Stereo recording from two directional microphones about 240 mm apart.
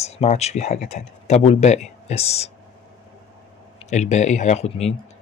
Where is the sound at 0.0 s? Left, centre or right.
Left.